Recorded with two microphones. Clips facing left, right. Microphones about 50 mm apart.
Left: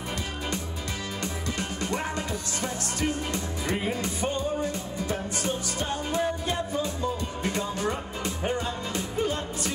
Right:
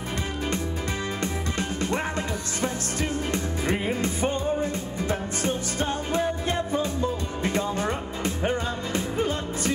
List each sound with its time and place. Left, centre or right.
1.2 s music: right
4.0 s music: right
7.4 s music: right